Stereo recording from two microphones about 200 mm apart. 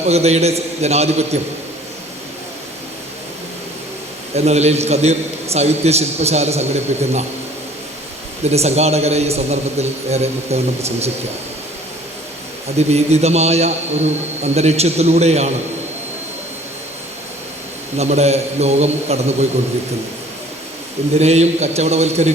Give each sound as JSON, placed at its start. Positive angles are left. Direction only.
{"t": 0.1, "sound": "a man's voice", "side_deg": -30}
{"t": 4.4, "sound": "a man's voice", "side_deg": -35}
{"t": 8.4, "sound": "a man's voice", "side_deg": -35}
{"t": 12.7, "sound": "a man's voice", "side_deg": -35}
{"t": 17.9, "sound": "a man's voice", "side_deg": -35}
{"t": 21.2, "sound": "a man's voice", "side_deg": -35}